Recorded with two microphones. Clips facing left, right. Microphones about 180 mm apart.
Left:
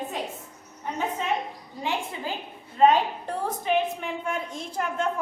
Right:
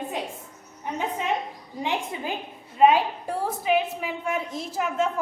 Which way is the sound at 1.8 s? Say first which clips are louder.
Right 2 dB; 20° right (ahead or behind).